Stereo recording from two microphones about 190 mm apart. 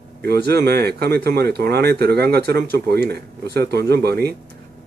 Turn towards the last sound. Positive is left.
turn(degrees=-55)  # may be behind; listen again after turning